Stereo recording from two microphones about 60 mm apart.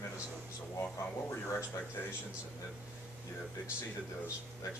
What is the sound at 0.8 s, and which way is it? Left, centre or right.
Speech, left.